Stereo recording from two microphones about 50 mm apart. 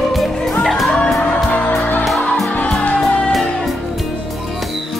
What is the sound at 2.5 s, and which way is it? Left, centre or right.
Music, left.